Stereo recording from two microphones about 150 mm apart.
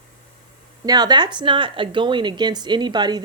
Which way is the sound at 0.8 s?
25° right (ahead or behind).